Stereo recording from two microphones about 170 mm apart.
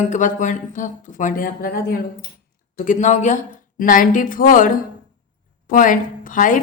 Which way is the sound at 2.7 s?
50° left (ahead or behind).